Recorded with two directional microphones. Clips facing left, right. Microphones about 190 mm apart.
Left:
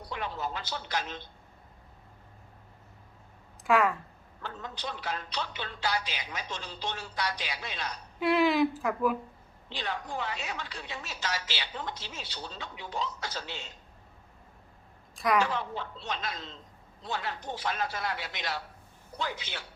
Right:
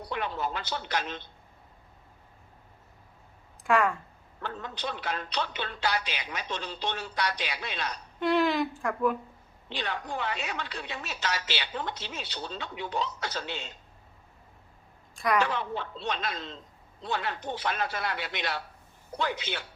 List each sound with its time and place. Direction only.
0.1 s a woman's voice: 65° right (ahead or behind)
3.6 s speech: centre (ahead or behind)
4.4 s a woman's voice: 65° right (ahead or behind)
8.2 s a woman's voice: centre (ahead or behind)
9.6 s a woman's voice: 65° right (ahead or behind)
15.1 s a sound: centre (ahead or behind)
15.4 s a woman's voice: 65° right (ahead or behind)